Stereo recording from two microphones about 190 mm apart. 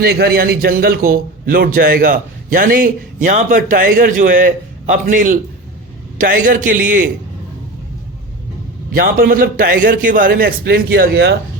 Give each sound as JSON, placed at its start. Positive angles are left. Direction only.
{"t": 0.0, "sound": "a man's voice", "side_deg": -55}
{"t": 8.9, "sound": "a man's voice", "side_deg": -50}